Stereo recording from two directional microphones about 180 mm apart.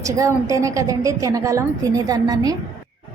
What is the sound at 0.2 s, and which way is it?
A woman's voice, 20° right (ahead or behind).